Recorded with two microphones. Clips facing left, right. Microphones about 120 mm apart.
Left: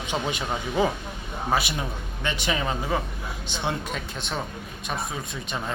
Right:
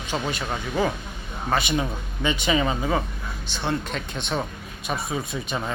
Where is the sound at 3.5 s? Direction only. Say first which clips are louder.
Right 2 dB; 15° left (ahead or behind).